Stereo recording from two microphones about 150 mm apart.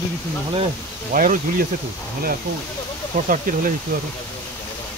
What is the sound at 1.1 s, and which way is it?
Speech, 65° right (ahead or behind).